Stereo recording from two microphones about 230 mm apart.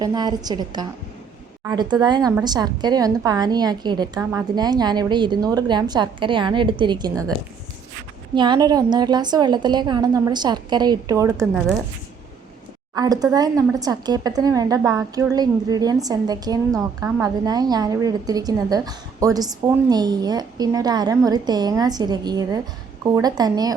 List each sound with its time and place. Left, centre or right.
0.0 s a woman's voice: centre
8.4 s a woman's voice: centre
13.0 s a woman's voice: centre